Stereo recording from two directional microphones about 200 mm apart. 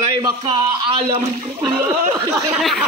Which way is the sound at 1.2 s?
15° right (ahead or behind).